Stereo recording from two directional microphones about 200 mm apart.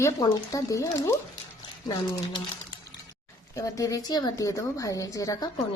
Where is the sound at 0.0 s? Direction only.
15° left (ahead or behind).